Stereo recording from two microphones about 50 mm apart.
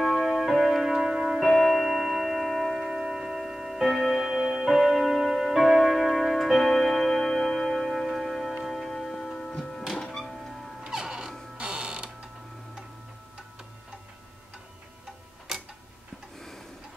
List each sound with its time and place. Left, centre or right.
0.0 s music: centre
1.4 s music: centre
2.8 s tick-tock: centre
8.2 s music: centre
10.8 s music: centre
11.5 s mechanisms: centre
16.3 s a sound: centre